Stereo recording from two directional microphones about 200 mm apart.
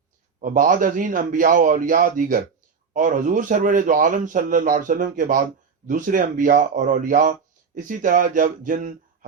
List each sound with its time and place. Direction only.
0.4 s a man's voice: 40° right (ahead or behind)